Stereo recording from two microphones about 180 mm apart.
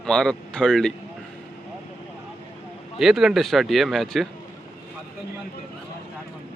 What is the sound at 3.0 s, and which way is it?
Speech, centre (ahead or behind).